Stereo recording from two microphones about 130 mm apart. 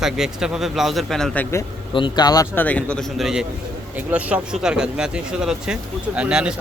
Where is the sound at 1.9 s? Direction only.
35° left (ahead or behind).